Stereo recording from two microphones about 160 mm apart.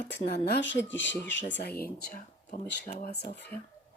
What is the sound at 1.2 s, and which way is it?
Speech, 85° left.